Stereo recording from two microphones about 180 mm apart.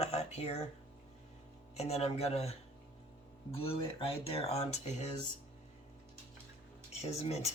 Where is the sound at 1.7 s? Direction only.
35° left (ahead or behind).